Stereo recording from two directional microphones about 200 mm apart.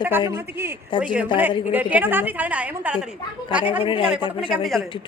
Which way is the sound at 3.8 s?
25° left (ahead or behind).